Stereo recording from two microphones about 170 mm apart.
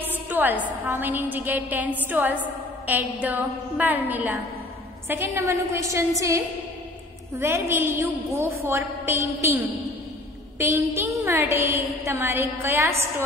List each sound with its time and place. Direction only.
0.3 s a woman's voice: 10° right (ahead or behind)
10.6 s a woman's voice: 15° right (ahead or behind)